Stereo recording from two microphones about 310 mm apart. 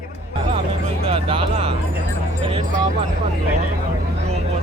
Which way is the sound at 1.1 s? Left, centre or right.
Centre.